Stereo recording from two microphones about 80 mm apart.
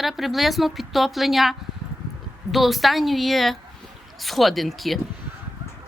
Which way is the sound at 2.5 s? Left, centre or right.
Centre.